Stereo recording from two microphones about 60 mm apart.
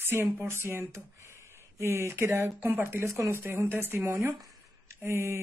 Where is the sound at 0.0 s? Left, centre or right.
Right.